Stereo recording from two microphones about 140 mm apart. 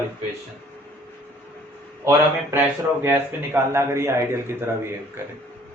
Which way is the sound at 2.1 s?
20° right (ahead or behind).